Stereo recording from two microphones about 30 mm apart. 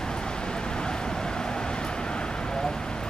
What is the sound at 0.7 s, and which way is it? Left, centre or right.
Vehicle, left.